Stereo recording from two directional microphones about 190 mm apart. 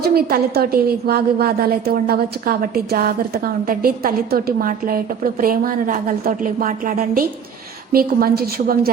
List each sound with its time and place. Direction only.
0.0 s a woman's voice: 55° right (ahead or behind)